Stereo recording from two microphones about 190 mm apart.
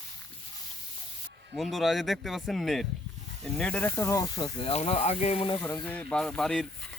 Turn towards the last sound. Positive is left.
turn(degrees=5)  # may be behind; listen again after turning